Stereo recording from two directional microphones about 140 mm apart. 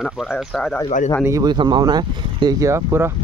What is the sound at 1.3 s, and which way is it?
Speech, 30° right (ahead or behind).